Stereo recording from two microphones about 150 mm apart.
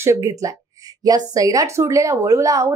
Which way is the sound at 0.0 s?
20° right (ahead or behind).